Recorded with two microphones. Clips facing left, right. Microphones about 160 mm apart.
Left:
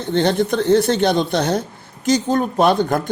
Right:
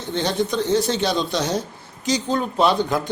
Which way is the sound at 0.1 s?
55° left (ahead or behind).